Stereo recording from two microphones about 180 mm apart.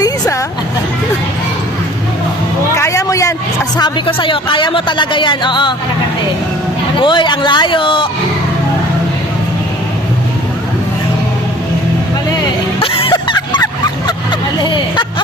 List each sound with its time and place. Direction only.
2.7 s speech: 15° left (ahead or behind)
7.0 s speech: 25° left (ahead or behind)
12.8 s a sound: 30° left (ahead or behind)
14.6 s speech: 25° left (ahead or behind)